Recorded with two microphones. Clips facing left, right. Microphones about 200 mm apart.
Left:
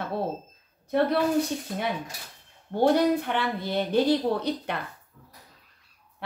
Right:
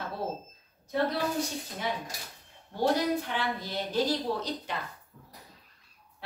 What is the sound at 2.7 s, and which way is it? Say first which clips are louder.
A woman's voice: left 6 dB; 60° left (ahead or behind).